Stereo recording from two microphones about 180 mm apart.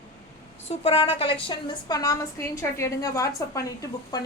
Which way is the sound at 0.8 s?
30° left (ahead or behind).